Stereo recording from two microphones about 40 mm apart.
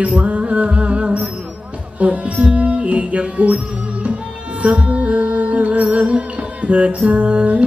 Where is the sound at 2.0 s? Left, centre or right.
Right.